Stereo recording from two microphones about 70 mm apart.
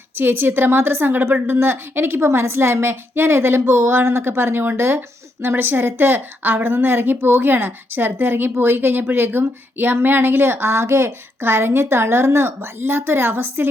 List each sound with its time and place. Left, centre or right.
0.2 s a woman's voice: right